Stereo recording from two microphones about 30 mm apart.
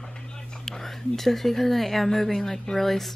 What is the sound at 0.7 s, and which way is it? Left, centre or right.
Speech, centre.